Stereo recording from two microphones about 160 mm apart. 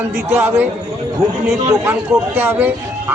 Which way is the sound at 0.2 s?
10° right (ahead or behind).